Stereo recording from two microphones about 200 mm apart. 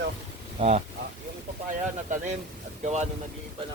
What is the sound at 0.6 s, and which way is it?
Speech, 35° right (ahead or behind).